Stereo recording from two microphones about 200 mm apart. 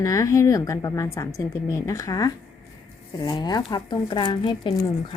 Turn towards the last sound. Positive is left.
turn(degrees=20)  # may be behind; listen again after turning